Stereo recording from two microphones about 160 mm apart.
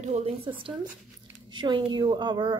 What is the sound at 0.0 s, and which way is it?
A woman's voice, 40° right (ahead or behind).